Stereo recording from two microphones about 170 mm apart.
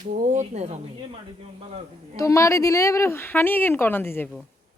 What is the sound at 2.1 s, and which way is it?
Speech, 20° left (ahead or behind).